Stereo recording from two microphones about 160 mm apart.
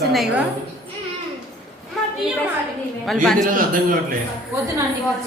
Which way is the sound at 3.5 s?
60° right (ahead or behind).